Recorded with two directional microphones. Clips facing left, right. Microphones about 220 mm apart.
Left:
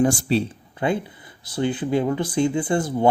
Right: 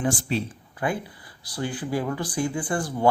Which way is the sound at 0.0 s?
40° left (ahead or behind).